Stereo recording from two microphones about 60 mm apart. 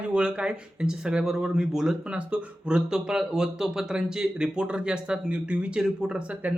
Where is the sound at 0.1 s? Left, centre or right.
Centre.